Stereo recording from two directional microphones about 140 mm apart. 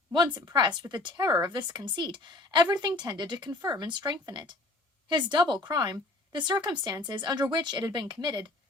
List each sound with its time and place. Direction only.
0.1 s speech: 30° right (ahead or behind)